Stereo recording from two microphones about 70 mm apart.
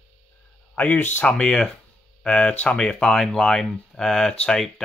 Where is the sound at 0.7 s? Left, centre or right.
Left.